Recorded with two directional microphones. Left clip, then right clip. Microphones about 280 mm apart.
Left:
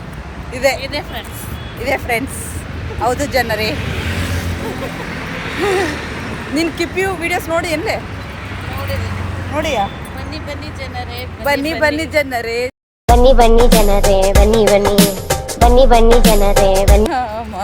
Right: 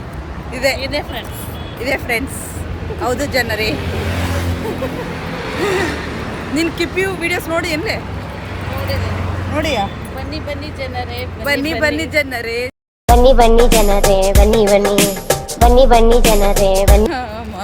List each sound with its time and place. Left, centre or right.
0.5 s speech: centre
0.8 s speech: centre
1.8 s speech: centre
6.7 s speech: centre
9.5 s speech: centre
11.4 s speech: centre
15.5 s music: centre